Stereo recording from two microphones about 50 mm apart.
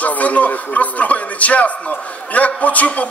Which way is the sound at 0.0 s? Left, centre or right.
Left.